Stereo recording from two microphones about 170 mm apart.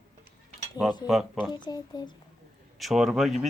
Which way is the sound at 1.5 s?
25° left (ahead or behind).